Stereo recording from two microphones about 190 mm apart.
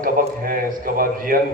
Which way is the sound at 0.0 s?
50° right (ahead or behind).